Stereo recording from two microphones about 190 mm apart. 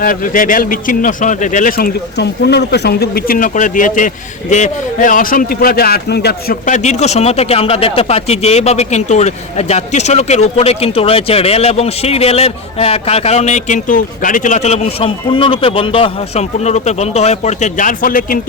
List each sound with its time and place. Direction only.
0.0 s a man's voice: 45° left (ahead or behind)
6.7 s speech: 40° left (ahead or behind)